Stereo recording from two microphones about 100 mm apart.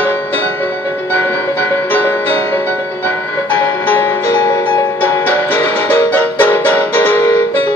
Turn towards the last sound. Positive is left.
turn(degrees=20)  # may be behind; listen again after turning